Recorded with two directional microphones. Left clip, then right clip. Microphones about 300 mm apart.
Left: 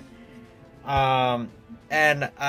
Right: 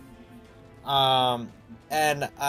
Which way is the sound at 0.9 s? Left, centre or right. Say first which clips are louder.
Even; centre.